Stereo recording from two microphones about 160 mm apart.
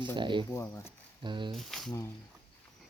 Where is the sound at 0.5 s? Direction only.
15° left (ahead or behind).